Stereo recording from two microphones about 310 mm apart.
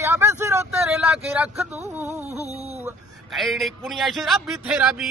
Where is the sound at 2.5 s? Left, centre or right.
Centre.